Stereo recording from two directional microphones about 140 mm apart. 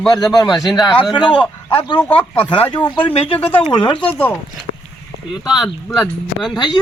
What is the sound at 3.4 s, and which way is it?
Speech, 15° left (ahead or behind).